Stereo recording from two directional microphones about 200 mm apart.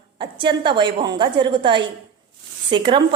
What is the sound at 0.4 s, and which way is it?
A woman's voice, 25° right (ahead or behind).